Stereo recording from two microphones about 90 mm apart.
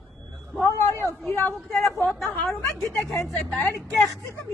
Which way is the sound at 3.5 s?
15° left (ahead or behind).